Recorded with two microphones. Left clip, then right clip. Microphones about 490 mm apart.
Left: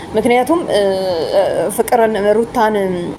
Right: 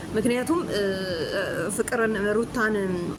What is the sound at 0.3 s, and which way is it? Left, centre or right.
Speech, right.